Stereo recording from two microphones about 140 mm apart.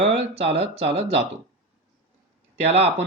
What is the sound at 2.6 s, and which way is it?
Speech, 45° right (ahead or behind).